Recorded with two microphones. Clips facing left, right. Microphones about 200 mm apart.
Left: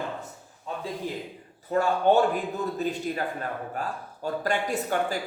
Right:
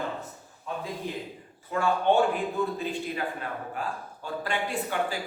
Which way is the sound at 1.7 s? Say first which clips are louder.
Left 2 dB; 40° left (ahead or behind).